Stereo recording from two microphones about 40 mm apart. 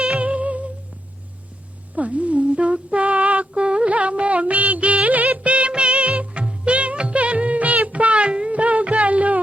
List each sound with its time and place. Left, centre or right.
0.2 s music: right
2.0 s humming: right
2.9 s mantra: right
3.9 s music: right